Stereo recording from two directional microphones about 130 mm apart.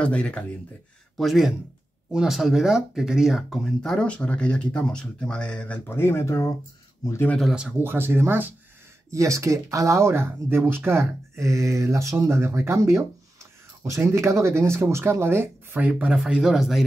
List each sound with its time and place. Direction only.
0.0 s speech: 10° left (ahead or behind)
7.8 s speech: 15° right (ahead or behind)